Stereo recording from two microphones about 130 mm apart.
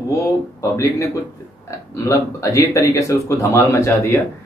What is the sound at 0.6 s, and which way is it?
A man's voice, 25° left (ahead or behind).